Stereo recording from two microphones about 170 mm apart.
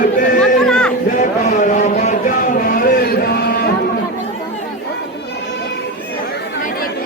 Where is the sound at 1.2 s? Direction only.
45° left (ahead or behind).